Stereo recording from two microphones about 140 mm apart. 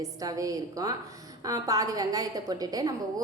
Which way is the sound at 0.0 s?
25° right (ahead or behind).